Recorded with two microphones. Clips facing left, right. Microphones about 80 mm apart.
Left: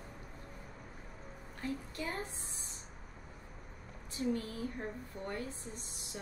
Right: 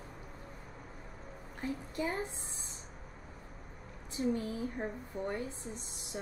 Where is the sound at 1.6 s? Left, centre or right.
Right.